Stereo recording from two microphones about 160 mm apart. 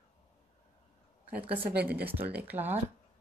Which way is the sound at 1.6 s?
80° right.